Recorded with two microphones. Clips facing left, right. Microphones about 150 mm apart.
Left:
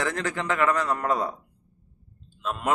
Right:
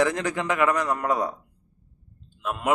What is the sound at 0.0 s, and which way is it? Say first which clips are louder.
Speech: right 4 dB; 15° right (ahead or behind).